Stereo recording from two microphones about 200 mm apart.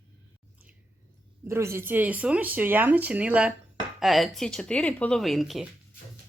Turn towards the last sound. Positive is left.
turn(degrees=0)  # may be behind; listen again after turning